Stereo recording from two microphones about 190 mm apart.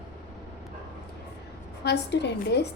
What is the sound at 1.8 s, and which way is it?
Speech, 65° left (ahead or behind).